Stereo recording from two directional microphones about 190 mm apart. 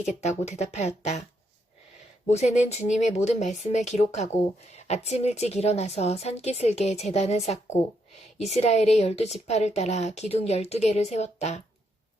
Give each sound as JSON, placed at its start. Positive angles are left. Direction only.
{"t": 0.2, "sound": "speech", "side_deg": 35}
{"t": 2.2, "sound": "speech", "side_deg": 35}